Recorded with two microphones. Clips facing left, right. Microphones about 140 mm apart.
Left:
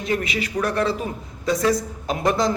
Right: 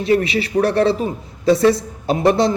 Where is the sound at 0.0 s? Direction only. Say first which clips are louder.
Right 7 dB; 30° right (ahead or behind).